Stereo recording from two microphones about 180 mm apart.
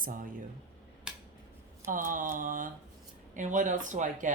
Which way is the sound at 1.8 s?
50° right (ahead or behind).